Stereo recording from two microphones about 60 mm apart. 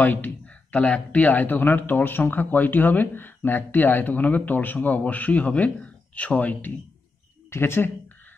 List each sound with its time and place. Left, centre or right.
0.0 s speech: left
7.5 s speech: left